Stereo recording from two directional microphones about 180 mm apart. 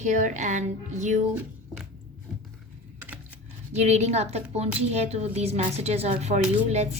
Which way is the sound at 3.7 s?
40° right (ahead or behind).